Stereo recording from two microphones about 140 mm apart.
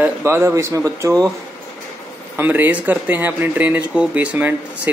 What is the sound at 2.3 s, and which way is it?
Speech, 15° right (ahead or behind).